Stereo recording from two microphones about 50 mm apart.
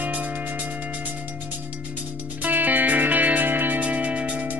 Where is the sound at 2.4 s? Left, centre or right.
Right.